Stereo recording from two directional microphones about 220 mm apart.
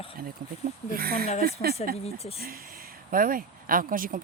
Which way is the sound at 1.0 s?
45° right (ahead or behind).